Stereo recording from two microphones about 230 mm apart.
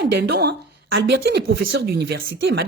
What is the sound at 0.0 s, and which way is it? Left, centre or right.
Speech, right.